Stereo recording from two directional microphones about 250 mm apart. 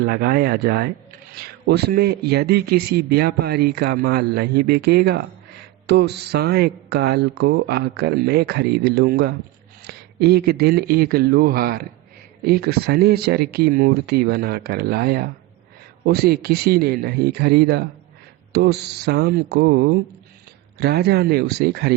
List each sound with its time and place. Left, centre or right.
0.1 s speech: right